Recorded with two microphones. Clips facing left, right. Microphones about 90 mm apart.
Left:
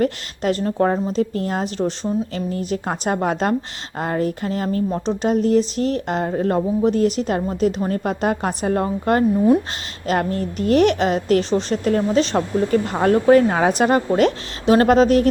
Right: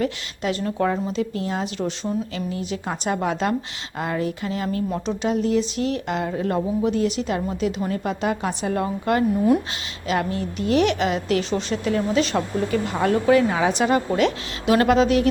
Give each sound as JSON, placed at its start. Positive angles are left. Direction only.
{"t": 0.0, "sound": "a woman's voice", "side_deg": 40}